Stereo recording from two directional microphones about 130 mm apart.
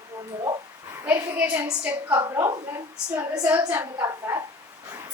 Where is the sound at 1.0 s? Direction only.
15° right (ahead or behind).